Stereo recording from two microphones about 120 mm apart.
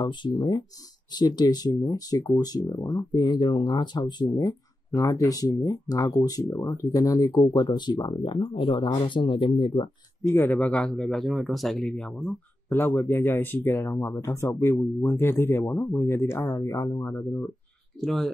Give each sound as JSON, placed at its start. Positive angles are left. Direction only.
{"t": 0.0, "sound": "speech", "side_deg": 40}
{"t": 10.2, "sound": "speech", "side_deg": 20}
{"t": 12.6, "sound": "speech", "side_deg": 20}
{"t": 18.0, "sound": "speech", "side_deg": 0}